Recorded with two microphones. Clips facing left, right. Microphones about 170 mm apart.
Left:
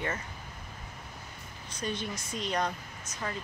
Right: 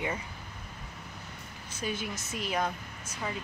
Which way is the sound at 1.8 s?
5° right (ahead or behind).